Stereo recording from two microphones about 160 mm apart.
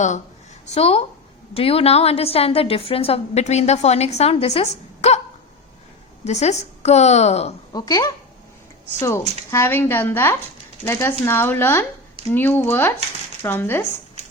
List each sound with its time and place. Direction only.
0.7 s a woman's voice: 40° left (ahead or behind)
6.2 s a woman's voice: 45° left (ahead or behind)
7.7 s speech: 25° left (ahead or behind)